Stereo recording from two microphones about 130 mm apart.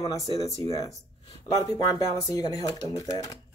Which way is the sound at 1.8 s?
30° left (ahead or behind).